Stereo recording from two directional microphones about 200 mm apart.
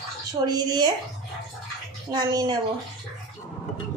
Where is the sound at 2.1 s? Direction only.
20° right (ahead or behind).